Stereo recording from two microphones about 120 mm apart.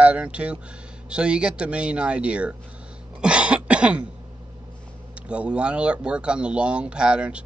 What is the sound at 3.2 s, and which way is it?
Cough, 10° right (ahead or behind).